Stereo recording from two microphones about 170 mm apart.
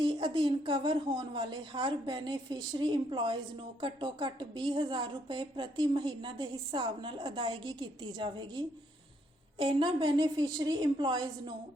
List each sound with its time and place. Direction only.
0.0 s a woman's voice: 30° right (ahead or behind)